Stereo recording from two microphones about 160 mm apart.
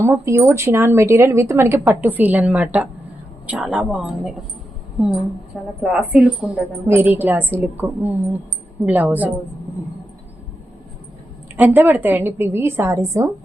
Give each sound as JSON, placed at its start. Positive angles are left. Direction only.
{"t": 0.0, "sound": "a woman's voice", "side_deg": -15}
{"t": 5.8, "sound": "a woman's voice", "side_deg": -5}
{"t": 11.5, "sound": "a woman's voice", "side_deg": -10}